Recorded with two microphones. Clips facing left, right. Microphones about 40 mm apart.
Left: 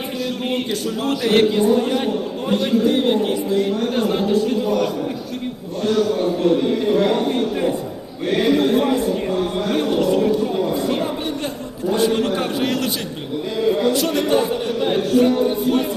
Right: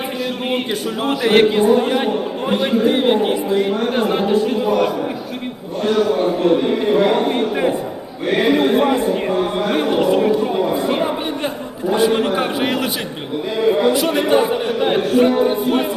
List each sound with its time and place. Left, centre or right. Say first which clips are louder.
1.0 s a man's voice: right 3 dB; right